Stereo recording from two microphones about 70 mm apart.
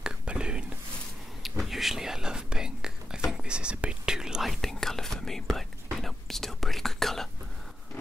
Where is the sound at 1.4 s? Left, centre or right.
Centre.